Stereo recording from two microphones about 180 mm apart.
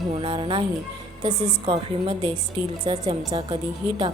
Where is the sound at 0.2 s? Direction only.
30° right (ahead or behind).